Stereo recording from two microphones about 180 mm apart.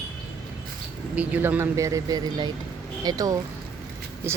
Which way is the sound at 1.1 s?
10° right (ahead or behind).